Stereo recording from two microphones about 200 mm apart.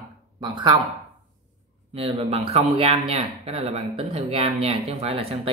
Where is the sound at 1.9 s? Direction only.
30° right (ahead or behind).